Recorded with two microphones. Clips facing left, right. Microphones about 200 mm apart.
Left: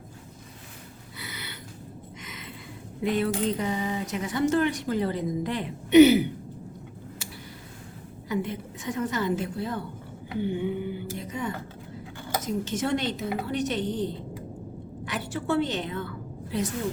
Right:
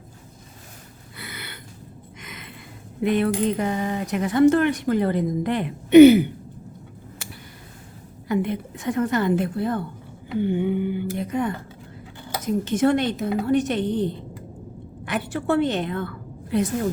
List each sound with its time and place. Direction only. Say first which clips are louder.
1.2 s a sound: right 2 dB; 55° right (ahead or behind)
3.0 s speech: right 5 dB; 55° right (ahead or behind)
8.3 s speech: right 6 dB; 60° right (ahead or behind)
12.6 s a woman's voice: right 11 dB; 55° right (ahead or behind)